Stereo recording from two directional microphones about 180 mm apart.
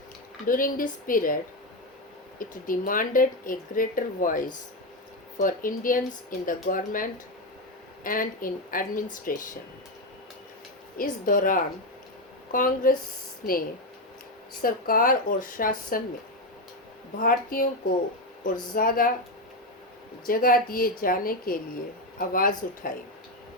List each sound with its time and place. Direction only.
0.4 s speech: 50° left (ahead or behind)
2.4 s speech: 50° left (ahead or behind)
10.9 s speech: 50° left (ahead or behind)
17.2 s speech: 50° left (ahead or behind)
18.7 s speech: 50° left (ahead or behind)
20.2 s speech: 55° left (ahead or behind)